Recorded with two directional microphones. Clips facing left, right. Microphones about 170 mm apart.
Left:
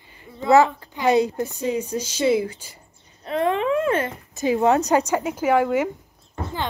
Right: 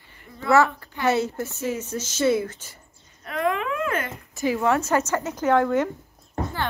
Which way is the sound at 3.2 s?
30° left (ahead or behind).